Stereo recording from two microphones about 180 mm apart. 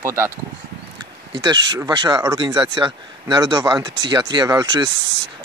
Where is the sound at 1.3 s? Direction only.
25° right (ahead or behind).